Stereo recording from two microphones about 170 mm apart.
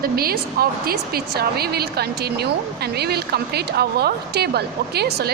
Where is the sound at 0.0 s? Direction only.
60° right (ahead or behind).